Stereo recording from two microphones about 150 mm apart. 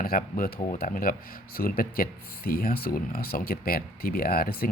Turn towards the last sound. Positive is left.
turn(degrees=80)